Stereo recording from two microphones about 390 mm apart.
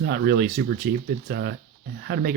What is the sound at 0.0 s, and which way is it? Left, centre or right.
Speech, right.